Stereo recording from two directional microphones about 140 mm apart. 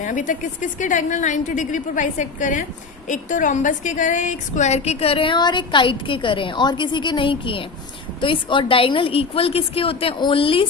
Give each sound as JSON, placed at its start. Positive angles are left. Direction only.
{"t": 0.0, "sound": "a woman's voice", "side_deg": 65}